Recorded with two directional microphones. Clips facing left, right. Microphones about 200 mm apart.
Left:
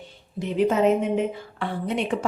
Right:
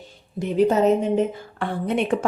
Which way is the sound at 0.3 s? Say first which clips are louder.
Right 3 dB; 40° right (ahead or behind).